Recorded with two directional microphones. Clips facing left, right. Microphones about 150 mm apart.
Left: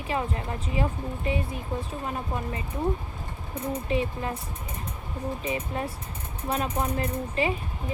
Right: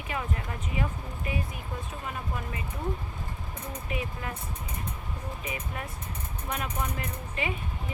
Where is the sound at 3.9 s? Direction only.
30° left (ahead or behind).